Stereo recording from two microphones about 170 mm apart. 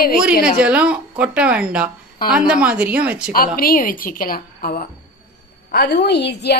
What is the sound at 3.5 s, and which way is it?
A woman's voice, 55° left (ahead or behind).